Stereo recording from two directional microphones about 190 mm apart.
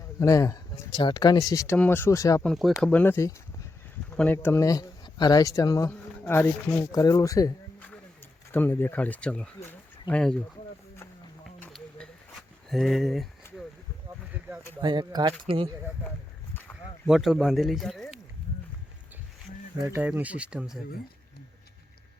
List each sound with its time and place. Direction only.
0.2 s speech: 15° left (ahead or behind)
2.4 s speech: centre (ahead or behind); by 7.5 s 20° left (ahead or behind)
8.5 s speech: 10° left (ahead or behind)
11.4 s a sound: 5° left (ahead or behind)
14.8 s speech: 20° right (ahead or behind)
17.1 s speech: centre (ahead or behind)
19.8 s speech: 10° right (ahead or behind)